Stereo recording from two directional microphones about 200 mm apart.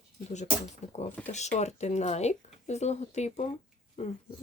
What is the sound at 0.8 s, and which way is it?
Speech, 35° left (ahead or behind).